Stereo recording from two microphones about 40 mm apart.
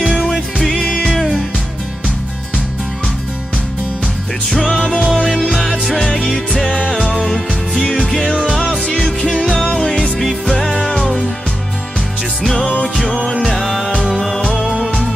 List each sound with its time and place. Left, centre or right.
0.7 s music: left
4.5 s music: centre
5.2 s music: centre
8.5 s music: centre
10.4 s music: centre
12.4 s music: centre